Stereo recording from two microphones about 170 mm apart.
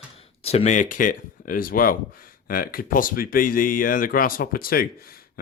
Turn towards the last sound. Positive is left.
turn(degrees=60)  # may be behind; listen again after turning